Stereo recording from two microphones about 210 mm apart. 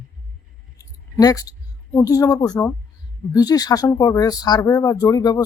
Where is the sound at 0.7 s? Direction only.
15° left (ahead or behind).